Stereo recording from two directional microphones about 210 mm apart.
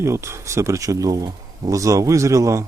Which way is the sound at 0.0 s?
15° right (ahead or behind).